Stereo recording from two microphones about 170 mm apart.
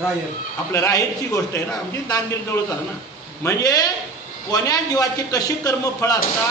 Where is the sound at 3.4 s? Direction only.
20° left (ahead or behind).